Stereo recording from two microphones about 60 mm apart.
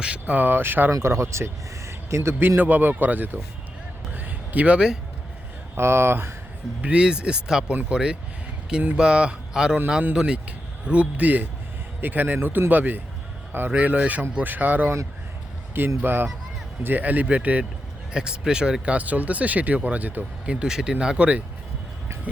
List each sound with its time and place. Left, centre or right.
0.0 s speech: centre
0.3 s a man's voice: right
1.0 s speech: right
1.9 s a sound: right
2.6 s a man's voice: right
4.1 s a sound: right
5.7 s speech: right
6.8 s a man's voice: centre
16.0 s a man's voice: right
20.4 s speech: centre